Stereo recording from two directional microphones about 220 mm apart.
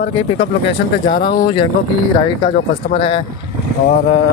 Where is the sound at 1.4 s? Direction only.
20° left (ahead or behind).